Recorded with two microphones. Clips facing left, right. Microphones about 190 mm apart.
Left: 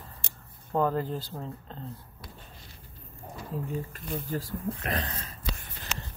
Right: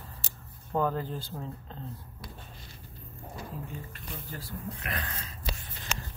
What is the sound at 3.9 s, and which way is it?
Speech, 40° left (ahead or behind).